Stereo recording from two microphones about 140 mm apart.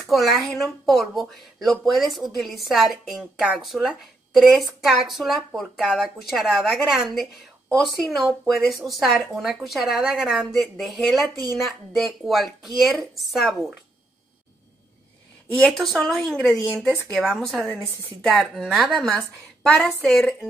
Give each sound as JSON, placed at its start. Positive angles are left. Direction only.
{"t": 0.0, "sound": "speech", "side_deg": 0}
{"t": 15.6, "sound": "speech", "side_deg": 0}